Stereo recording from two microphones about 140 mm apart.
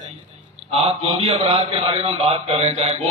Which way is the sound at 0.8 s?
45° right (ahead or behind).